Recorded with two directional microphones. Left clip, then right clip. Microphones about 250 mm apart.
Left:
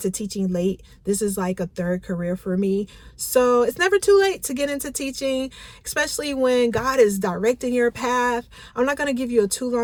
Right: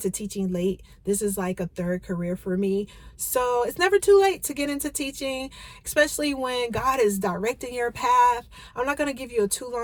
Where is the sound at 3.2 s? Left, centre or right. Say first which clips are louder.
Left 6 dB; centre.